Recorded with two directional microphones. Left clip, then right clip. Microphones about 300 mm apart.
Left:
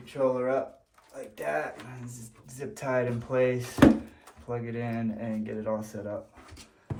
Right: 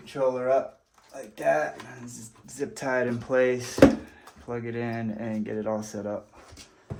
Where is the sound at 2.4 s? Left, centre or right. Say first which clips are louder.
Right 3 dB; right.